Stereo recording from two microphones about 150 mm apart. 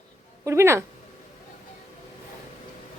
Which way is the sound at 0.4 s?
20° right (ahead or behind).